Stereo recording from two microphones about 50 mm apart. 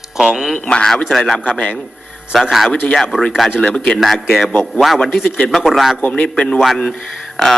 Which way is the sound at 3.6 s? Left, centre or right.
Centre.